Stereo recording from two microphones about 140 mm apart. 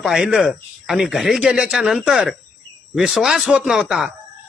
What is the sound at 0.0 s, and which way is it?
Speech, 5° right (ahead or behind).